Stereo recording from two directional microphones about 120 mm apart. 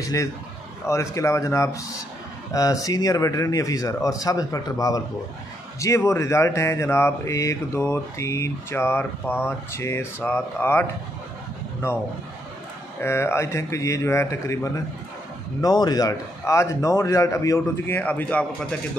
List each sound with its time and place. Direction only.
0.0 s speech: 30° left (ahead or behind)
13.0 s speech: 20° left (ahead or behind)